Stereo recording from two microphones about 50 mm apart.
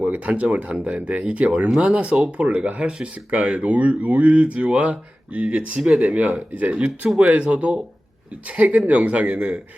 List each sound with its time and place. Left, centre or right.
0.0 s speech: right